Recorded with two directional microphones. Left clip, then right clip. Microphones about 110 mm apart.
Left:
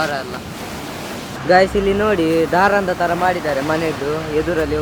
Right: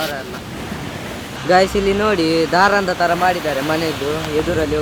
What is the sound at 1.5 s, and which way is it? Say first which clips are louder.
Speech: left 1 dB; 30° right (ahead or behind).